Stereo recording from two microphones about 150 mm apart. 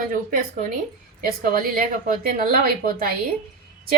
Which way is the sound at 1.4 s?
65° right (ahead or behind).